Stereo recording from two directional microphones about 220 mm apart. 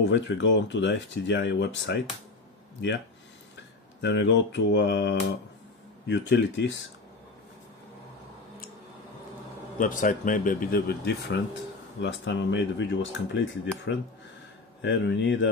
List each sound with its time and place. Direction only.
0.0 s speech: 55° left (ahead or behind)
4.0 s speech: 55° left (ahead or behind)
9.8 s speech: 35° left (ahead or behind)
12.0 s speech: 55° left (ahead or behind)